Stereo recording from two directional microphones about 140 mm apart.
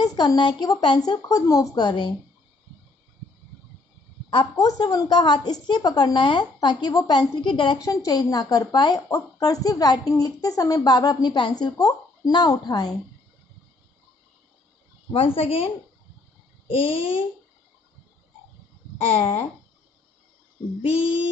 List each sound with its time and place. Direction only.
0.0 s a woman's voice: 30° left (ahead or behind)
4.6 s a woman's voice: 25° left (ahead or behind)
15.1 s a woman's voice: 40° left (ahead or behind)
19.0 s a woman's voice: 45° left (ahead or behind)